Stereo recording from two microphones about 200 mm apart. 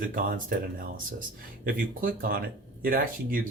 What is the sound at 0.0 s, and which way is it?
Speech, 45° right (ahead or behind).